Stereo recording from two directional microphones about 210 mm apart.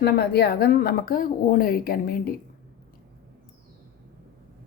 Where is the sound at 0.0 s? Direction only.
50° left (ahead or behind).